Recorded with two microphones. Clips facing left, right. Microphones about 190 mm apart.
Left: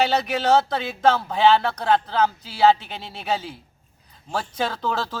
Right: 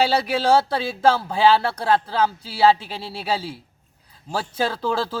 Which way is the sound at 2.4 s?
30° right (ahead or behind).